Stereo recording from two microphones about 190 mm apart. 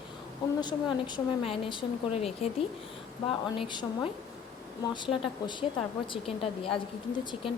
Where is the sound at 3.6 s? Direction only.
25° left (ahead or behind).